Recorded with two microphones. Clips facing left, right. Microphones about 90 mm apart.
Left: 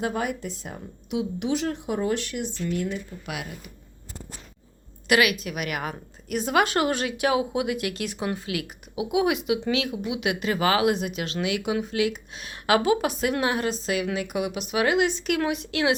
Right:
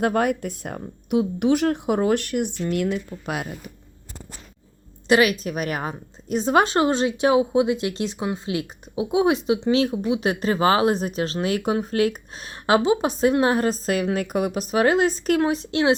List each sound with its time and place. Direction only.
0.0 s speech: 55° right (ahead or behind); by 3.0 s 75° right (ahead or behind)
3.2 s speech: 35° right (ahead or behind)
5.0 s a woman's voice: 30° right (ahead or behind)